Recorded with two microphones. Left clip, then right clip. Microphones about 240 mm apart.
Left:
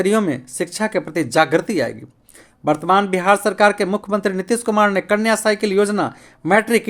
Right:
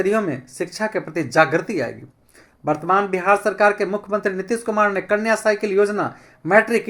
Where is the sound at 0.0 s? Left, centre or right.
Left.